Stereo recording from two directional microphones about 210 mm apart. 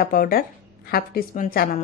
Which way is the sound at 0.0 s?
45° left (ahead or behind).